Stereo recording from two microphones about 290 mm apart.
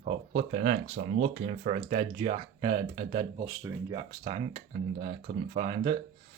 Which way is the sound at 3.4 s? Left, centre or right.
Centre.